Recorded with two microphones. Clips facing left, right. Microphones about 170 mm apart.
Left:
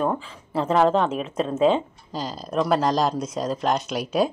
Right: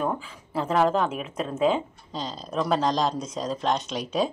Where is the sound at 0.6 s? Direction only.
Centre (ahead or behind).